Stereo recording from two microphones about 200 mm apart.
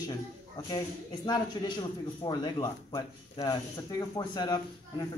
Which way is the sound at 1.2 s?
20° left (ahead or behind).